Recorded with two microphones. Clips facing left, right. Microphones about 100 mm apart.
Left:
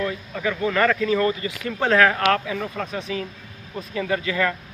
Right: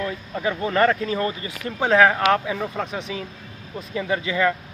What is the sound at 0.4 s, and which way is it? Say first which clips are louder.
Speech: right 1 dB; 30° right (ahead or behind).